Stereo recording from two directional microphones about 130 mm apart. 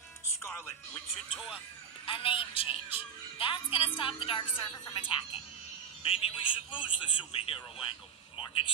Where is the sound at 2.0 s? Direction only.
45° left (ahead or behind).